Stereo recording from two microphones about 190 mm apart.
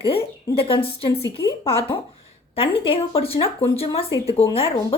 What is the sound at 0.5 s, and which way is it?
A woman's voice, 30° left (ahead or behind).